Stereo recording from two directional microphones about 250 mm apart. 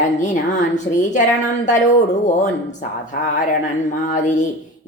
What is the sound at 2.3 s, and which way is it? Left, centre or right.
Speech, left.